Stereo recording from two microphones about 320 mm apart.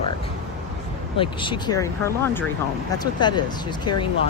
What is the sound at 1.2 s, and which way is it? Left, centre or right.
Speech, centre.